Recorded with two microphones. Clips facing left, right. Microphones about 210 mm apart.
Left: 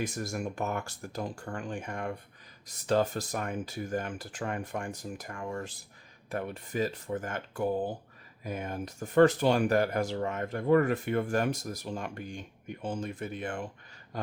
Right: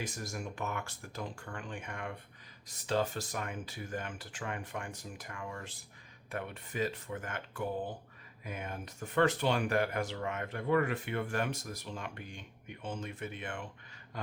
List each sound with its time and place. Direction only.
0.3 s speech: 45° left (ahead or behind)